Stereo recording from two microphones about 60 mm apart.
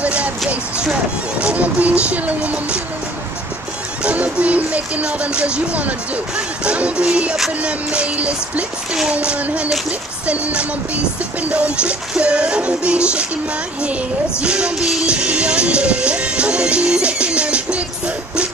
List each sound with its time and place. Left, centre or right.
0.0 s a sound: right
1.4 s speech: right
4.0 s speech: right
14.4 s speech: centre
15.0 s music: centre